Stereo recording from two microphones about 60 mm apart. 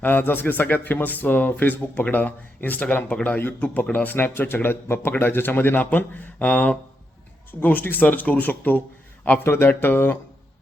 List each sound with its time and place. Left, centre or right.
0.0 s a man's voice: left